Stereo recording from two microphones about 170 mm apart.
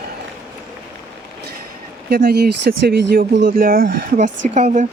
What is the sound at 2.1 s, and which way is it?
Speech, 70° right (ahead or behind).